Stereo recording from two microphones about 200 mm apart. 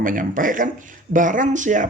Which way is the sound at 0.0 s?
45° right (ahead or behind).